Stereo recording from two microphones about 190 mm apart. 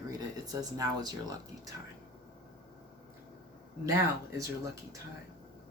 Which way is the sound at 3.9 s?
15° right (ahead or behind).